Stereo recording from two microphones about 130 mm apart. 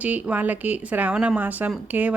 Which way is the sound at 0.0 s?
10° right (ahead or behind).